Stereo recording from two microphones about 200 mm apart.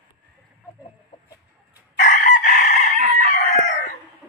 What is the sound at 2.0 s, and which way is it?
Chicken, 40° left (ahead or behind).